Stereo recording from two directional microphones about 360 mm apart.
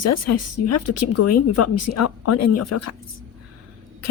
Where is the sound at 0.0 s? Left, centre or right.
Left.